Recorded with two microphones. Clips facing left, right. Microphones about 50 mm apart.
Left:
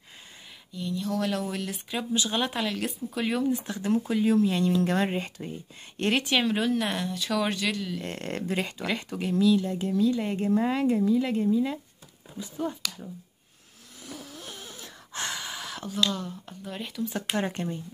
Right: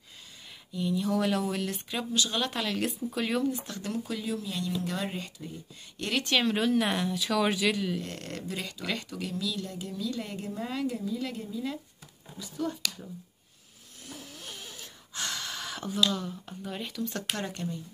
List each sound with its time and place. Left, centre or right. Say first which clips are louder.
0.7 s speech: right 1 dB; centre
2.1 s speech: left 2 dB; left
2.7 s speech: right 1 dB; centre
3.6 s speech: left 7 dB; left
4.3 s speech: left 12 dB; left
6.2 s speech: left 1 dB; centre
8.0 s speech: left 5 dB; left
15.2 s gasp: left 1 dB; centre
15.6 s speech: even; centre
17.4 s speech: left 5 dB; left